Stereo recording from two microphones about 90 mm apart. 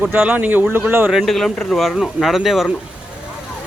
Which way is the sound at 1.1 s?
Centre (ahead or behind).